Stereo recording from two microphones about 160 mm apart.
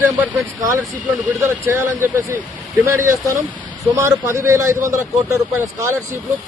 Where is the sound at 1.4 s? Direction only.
20° right (ahead or behind).